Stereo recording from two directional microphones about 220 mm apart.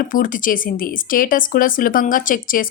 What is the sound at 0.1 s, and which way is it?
Speech, 35° left (ahead or behind).